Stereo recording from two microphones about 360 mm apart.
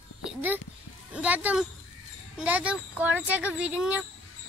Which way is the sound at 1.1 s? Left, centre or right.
Centre.